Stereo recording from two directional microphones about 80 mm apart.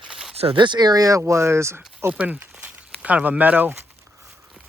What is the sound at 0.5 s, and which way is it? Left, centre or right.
Speech, right.